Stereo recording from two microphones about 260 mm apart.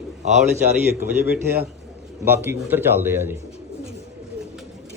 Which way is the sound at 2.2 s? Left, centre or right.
Centre.